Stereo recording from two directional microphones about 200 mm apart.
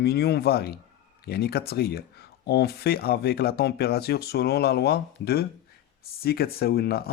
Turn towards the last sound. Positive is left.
turn(degrees=50)  # may be behind; listen again after turning